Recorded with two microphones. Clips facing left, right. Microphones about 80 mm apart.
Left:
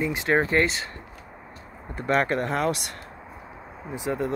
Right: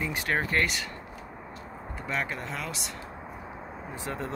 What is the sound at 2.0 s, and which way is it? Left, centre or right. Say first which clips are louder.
Speech: left 10 dB; left.